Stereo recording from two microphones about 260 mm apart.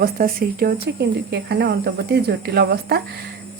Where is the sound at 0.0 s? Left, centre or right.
Right.